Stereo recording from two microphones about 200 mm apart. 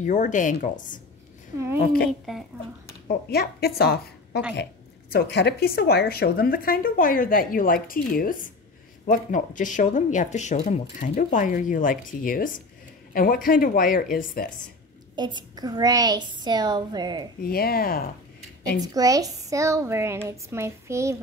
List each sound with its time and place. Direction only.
0.0 s speech: 40° left (ahead or behind)
2.3 s a child's voice: centre (ahead or behind)
3.1 s a woman's voice: 50° left (ahead or behind)
15.1 s a woman's voice: 20° right (ahead or behind)
17.4 s a woman's voice: 50° left (ahead or behind)
18.8 s a woman's voice: 20° right (ahead or behind)